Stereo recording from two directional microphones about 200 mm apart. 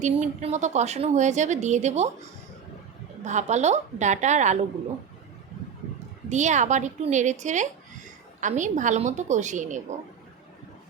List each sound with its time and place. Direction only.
0.0 s speech: 35° right (ahead or behind)
3.2 s speech: 35° right (ahead or behind)
6.2 s speech: 35° right (ahead or behind)